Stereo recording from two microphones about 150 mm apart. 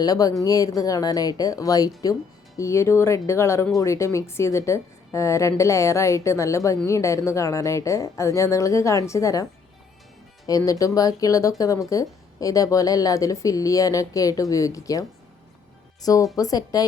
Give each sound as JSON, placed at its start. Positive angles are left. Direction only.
{"t": 0.0, "sound": "speech", "side_deg": 25}
{"t": 10.7, "sound": "speech", "side_deg": 20}